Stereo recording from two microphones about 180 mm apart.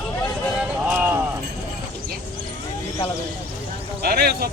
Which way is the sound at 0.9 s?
10° right (ahead or behind).